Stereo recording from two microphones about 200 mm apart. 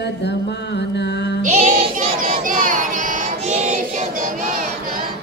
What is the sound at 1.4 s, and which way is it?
Child singing, 35° right (ahead or behind).